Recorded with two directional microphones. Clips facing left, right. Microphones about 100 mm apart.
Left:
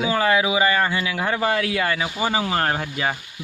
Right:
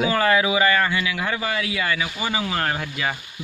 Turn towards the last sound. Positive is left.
turn(degrees=30)  # may be behind; listen again after turning